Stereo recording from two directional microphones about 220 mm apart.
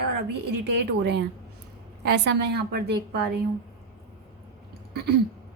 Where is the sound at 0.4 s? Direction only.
50° right (ahead or behind).